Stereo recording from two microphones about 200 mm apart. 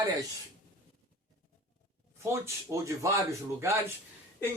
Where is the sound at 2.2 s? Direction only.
15° right (ahead or behind).